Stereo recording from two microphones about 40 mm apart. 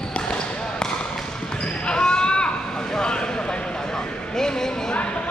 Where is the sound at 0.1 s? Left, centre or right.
Left.